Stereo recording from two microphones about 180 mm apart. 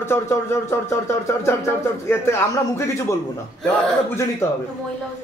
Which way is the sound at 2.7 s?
15° left (ahead or behind).